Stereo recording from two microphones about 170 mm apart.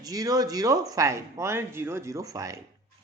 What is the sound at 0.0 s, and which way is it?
Speech, 20° right (ahead or behind).